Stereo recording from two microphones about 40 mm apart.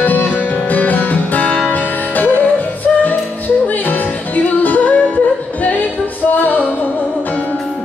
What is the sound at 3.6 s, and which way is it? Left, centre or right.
Music, left.